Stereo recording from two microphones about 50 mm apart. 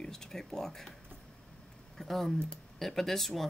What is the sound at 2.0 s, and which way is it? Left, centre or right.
Speech, centre.